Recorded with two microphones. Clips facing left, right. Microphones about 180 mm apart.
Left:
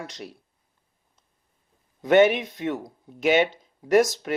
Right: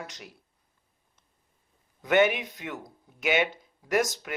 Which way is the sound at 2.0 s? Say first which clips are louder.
Left 5 dB; 30° left (ahead or behind).